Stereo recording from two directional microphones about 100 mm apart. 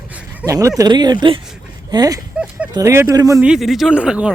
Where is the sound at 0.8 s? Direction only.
45° right (ahead or behind).